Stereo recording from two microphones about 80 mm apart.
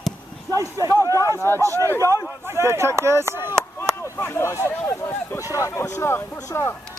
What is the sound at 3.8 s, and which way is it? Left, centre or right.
Speech, left.